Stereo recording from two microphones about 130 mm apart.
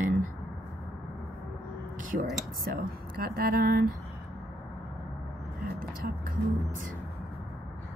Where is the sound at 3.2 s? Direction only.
90° right.